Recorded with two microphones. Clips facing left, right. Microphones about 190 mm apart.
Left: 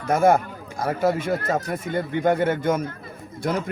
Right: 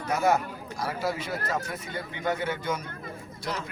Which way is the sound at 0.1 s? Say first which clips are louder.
Left 7 dB; 50° left (ahead or behind).